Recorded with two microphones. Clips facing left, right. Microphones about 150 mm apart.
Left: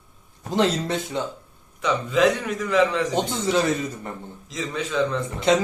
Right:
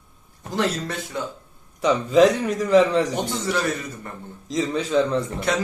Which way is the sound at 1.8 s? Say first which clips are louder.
Right 4 dB; 35° right (ahead or behind).